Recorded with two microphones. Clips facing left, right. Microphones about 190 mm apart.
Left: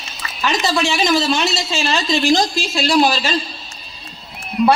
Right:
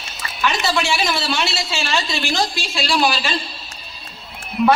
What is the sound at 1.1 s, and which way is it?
A man's voice, 40° left (ahead or behind).